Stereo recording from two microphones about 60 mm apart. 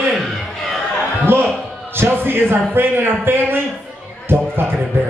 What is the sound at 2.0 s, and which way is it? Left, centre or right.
A man's voice, right.